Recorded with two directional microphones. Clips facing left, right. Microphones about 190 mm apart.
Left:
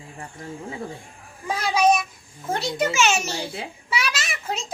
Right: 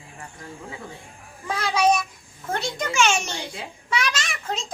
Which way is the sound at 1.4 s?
10° left (ahead or behind).